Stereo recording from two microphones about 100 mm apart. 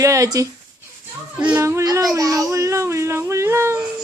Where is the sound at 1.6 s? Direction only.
30° right (ahead or behind).